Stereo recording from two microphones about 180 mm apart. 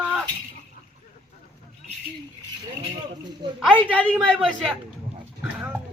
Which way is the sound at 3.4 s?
20° right (ahead or behind).